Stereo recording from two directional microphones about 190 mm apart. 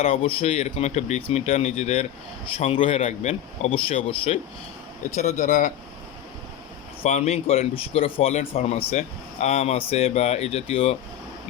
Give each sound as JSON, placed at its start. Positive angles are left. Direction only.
{"t": 0.0, "sound": "speech", "side_deg": 30}
{"t": 7.0, "sound": "speech", "side_deg": 35}